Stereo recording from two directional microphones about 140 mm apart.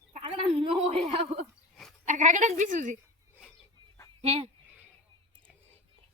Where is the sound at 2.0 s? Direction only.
65° right (ahead or behind).